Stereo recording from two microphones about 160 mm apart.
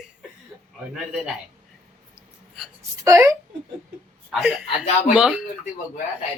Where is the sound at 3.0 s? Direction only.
20° right (ahead or behind).